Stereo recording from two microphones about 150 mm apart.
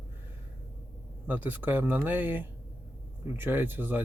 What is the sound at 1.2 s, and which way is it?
Speech, 15° right (ahead or behind).